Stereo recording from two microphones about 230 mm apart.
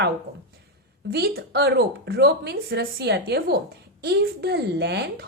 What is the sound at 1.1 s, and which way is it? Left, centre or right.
Speech, right.